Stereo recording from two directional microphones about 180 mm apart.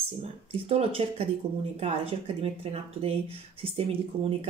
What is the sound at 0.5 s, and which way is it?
Speech, 35° right (ahead or behind).